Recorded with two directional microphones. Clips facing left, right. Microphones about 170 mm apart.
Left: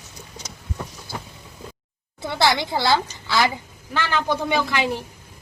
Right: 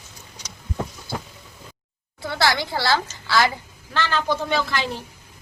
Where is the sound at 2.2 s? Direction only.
20° left (ahead or behind).